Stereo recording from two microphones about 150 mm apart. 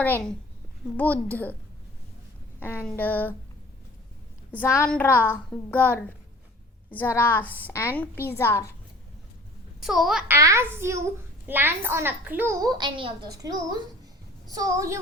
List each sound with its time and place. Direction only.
0.0 s a woman's voice: 10° left (ahead or behind)
2.6 s a woman's voice: 15° left (ahead or behind)
4.5 s a woman's voice: 15° left (ahead or behind)
7.0 s a woman's voice: 15° left (ahead or behind)
9.8 s a child's voice: centre (ahead or behind)
10.2 s a child's voice: 20° right (ahead or behind)
12.6 s a child's voice: 30° right (ahead or behind)